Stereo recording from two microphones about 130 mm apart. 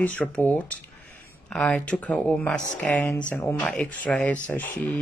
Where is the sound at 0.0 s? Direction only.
10° left (ahead or behind).